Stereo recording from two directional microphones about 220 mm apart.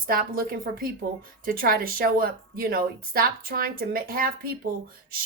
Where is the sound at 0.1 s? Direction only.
40° right (ahead or behind).